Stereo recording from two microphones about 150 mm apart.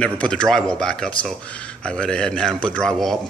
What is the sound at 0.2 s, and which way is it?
Speech, 5° left (ahead or behind).